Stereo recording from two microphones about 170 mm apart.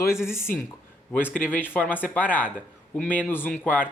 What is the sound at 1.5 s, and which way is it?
Speech, 10° left (ahead or behind).